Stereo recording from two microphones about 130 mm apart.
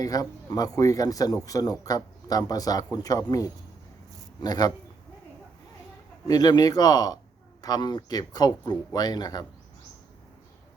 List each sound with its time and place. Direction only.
0.0 s speech: 30° left (ahead or behind)
6.2 s speech: 30° left (ahead or behind)